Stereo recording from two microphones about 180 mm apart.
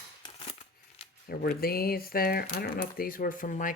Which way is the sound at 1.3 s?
55° left (ahead or behind).